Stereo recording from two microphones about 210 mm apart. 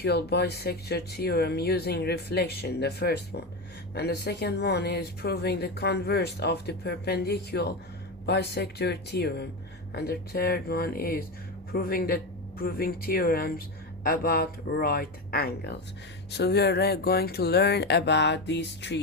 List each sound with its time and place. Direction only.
0.0 s speech: 50° left (ahead or behind)